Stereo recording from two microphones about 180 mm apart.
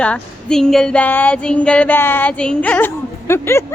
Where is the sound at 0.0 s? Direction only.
5° left (ahead or behind).